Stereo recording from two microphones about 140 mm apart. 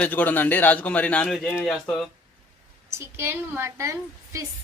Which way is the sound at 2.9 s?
15° right (ahead or behind).